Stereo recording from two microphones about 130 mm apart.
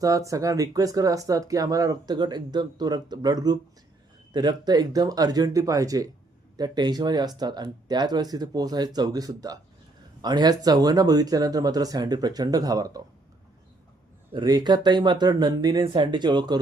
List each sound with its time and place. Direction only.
0.0 s speech: 25° right (ahead or behind)
14.3 s speech: 30° right (ahead or behind)